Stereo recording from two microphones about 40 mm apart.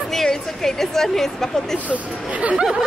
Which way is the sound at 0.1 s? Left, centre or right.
Centre.